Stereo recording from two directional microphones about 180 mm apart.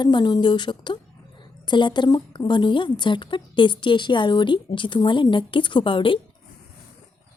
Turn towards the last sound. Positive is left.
turn(degrees=30)  # may be behind; listen again after turning